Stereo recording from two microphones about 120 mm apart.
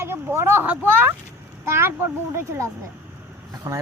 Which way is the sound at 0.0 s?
20° right (ahead or behind).